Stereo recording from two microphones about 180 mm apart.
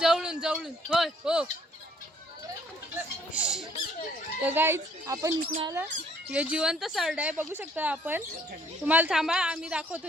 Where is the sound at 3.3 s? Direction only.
5° right (ahead or behind).